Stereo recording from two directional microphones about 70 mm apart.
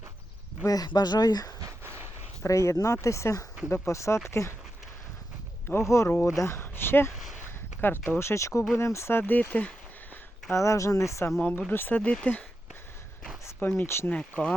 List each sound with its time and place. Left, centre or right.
0.7 s speech: left
2.4 s speech: left
5.7 s speech: left
6.2 s speech: left
8.2 s speech: left
10.5 s speech: left
11.3 s speech: left
11.7 s speech: left
11.9 s speech: centre
13.6 s speech: left
14.1 s speech: centre